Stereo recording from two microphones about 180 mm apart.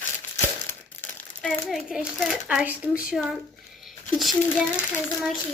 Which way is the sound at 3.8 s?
Centre (ahead or behind).